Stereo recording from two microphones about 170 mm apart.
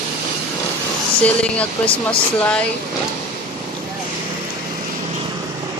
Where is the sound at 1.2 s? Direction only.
5° left (ahead or behind).